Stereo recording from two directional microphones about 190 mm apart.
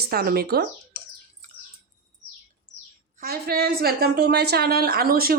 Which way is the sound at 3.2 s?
55° right (ahead or behind).